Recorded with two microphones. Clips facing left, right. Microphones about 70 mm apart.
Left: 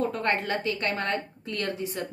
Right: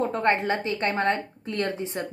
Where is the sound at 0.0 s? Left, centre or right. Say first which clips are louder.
Right 4 dB; right.